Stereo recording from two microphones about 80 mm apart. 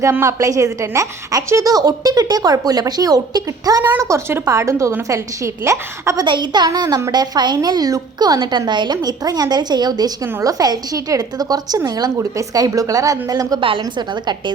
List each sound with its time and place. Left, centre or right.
0.0 s a woman's voice: right
4.0 s a woman's voice: right
6.2 s a woman's voice: right
10.4 s a woman's voice: right
12.1 s speech: right
13.6 s a woman's voice: right